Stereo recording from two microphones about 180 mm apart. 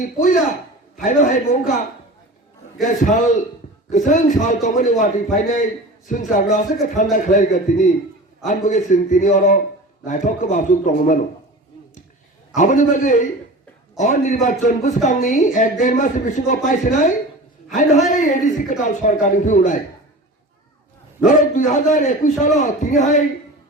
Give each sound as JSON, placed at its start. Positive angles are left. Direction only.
{"t": 0.0, "sound": "speech", "side_deg": 50}
{"t": 2.8, "sound": "speech", "side_deg": 45}
{"t": 12.5, "sound": "speech", "side_deg": 45}
{"t": 21.2, "sound": "speech", "side_deg": 45}